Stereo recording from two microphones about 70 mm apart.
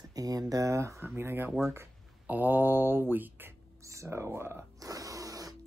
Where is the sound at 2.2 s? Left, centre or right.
Right.